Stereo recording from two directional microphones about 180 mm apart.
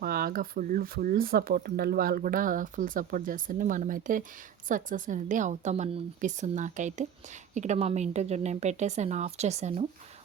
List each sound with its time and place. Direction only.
0.0 s a woman's voice: 55° right (ahead or behind); by 9.8 s 40° right (ahead or behind)